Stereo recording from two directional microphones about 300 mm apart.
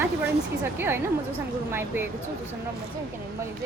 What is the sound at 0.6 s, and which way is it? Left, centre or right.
Speech, centre.